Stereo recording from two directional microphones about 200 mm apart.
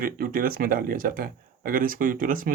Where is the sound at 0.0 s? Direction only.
45° right (ahead or behind).